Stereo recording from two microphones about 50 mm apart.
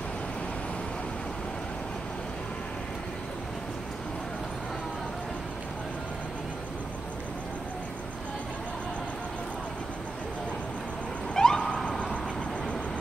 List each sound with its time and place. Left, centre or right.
11.3 s vehicle: centre